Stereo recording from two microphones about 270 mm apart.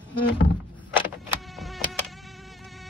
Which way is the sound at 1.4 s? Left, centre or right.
Centre.